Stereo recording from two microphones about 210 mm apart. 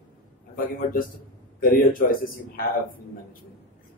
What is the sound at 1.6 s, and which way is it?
Speech, 45° left (ahead or behind).